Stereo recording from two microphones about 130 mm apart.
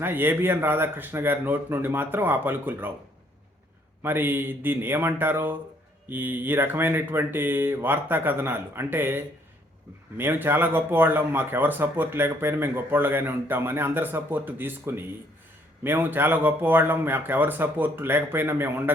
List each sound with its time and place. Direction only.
0.0 s speech: 15° right (ahead or behind)
4.0 s speech: 15° right (ahead or behind)